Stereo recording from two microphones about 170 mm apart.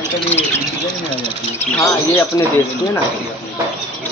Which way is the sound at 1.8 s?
15° left (ahead or behind).